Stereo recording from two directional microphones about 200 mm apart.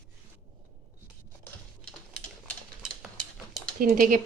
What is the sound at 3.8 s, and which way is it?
Speech, 45° right (ahead or behind).